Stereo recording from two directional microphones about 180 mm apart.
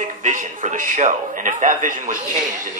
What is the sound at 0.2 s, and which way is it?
Speech, 45° right (ahead or behind).